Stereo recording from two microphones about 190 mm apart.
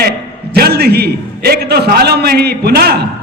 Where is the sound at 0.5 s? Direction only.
55° right (ahead or behind).